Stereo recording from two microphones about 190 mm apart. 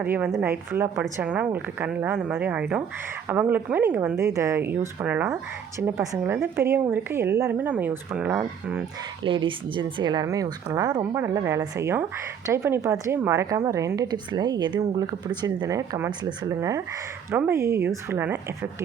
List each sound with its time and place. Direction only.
0.0 s a woman's voice: 5° right (ahead or behind)
9.2 s a woman's voice: 25° right (ahead or behind); by 18.7 s 10° right (ahead or behind)